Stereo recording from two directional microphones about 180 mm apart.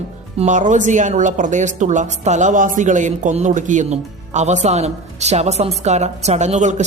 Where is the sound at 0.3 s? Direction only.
45° right (ahead or behind).